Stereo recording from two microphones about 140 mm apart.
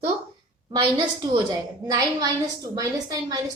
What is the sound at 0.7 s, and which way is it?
A woman's voice, 30° right (ahead or behind).